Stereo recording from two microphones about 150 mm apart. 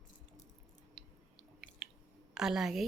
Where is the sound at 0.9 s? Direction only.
5° right (ahead or behind).